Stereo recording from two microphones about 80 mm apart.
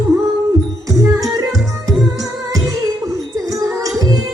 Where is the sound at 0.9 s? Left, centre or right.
Right.